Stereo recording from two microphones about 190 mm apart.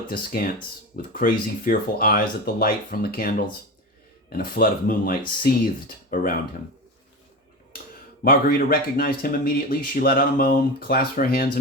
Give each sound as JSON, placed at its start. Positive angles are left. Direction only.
{"t": 0.1, "sound": "speech", "side_deg": 50}
{"t": 8.2, "sound": "speech", "side_deg": 50}